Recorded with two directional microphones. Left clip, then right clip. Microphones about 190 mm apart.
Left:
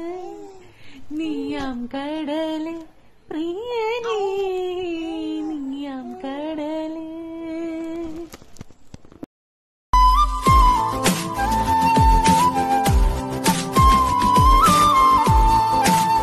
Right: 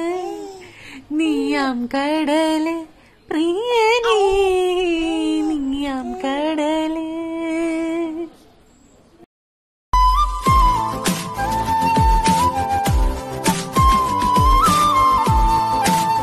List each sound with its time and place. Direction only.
0.0 s babbling: 10° right (ahead or behind)
0.8 s a sound: 10° right (ahead or behind)
9.8 s music: centre (ahead or behind)